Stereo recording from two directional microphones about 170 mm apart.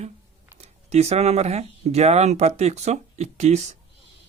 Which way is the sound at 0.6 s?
40° right (ahead or behind).